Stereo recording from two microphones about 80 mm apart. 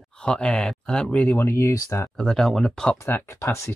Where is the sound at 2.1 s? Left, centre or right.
Centre.